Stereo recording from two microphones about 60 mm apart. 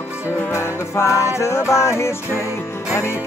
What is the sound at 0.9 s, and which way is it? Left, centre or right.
Music, left.